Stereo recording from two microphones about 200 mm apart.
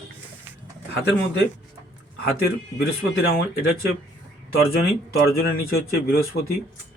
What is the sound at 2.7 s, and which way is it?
Speech, 50° left (ahead or behind).